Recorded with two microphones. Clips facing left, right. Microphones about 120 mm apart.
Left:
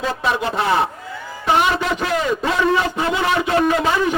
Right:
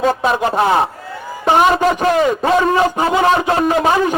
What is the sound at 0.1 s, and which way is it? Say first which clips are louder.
A man's voice: right 5 dB; 45° right (ahead or behind).